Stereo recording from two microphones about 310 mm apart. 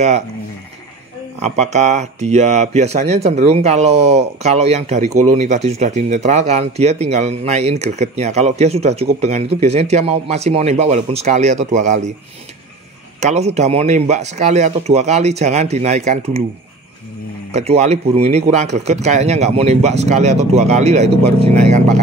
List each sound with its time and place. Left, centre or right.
1.4 s speech: right
13.2 s speech: right
17.5 s speech: right